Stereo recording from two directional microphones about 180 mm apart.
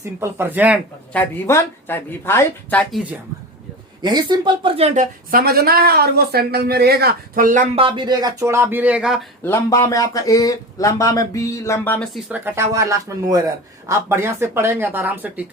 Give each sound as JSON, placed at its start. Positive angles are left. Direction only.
{"t": 0.0, "sound": "speech", "side_deg": -15}
{"t": 1.1, "sound": "speech", "side_deg": 10}
{"t": 4.0, "sound": "speech", "side_deg": -25}
{"t": 4.9, "sound": "speech", "side_deg": -55}
{"t": 7.8, "sound": "speech", "side_deg": -30}
{"t": 9.4, "sound": "speech", "side_deg": 15}
{"t": 12.3, "sound": "speech", "side_deg": -15}